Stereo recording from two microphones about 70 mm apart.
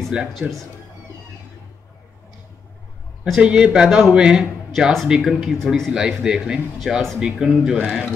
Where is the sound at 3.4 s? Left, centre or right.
Centre.